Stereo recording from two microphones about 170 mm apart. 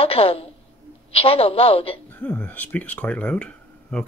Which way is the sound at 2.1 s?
10° left (ahead or behind).